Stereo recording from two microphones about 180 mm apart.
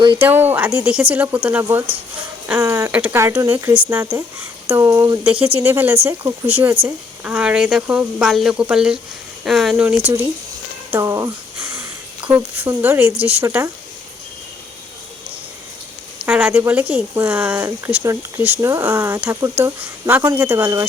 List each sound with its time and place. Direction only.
0.2 s speech: 10° right (ahead or behind)
5.3 s speech: 30° right (ahead or behind)
5.5 s speech: 10° right (ahead or behind)
10.9 s speech: 15° right (ahead or behind)
16.2 s speech: 10° right (ahead or behind)